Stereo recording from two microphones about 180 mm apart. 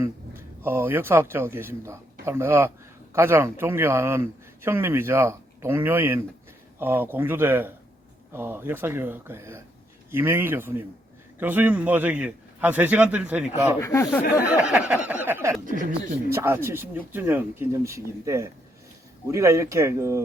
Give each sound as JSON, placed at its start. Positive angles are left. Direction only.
{"t": 0.0, "sound": "a man's voice", "side_deg": -15}
{"t": 13.8, "sound": "speech", "side_deg": 15}
{"t": 14.4, "sound": "speech", "side_deg": -5}
{"t": 15.6, "sound": "speech", "side_deg": -50}
{"t": 16.3, "sound": "speech", "side_deg": -15}